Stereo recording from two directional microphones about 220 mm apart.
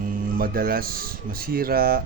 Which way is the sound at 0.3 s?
40° right (ahead or behind).